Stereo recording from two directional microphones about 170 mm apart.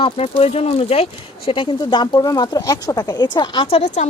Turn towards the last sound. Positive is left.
turn(degrees=40)  # may be behind; listen again after turning